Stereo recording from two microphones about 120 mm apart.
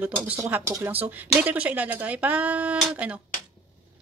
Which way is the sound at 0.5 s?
20° right (ahead or behind).